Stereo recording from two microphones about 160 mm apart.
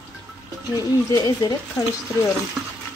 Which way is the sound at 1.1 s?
25° left (ahead or behind).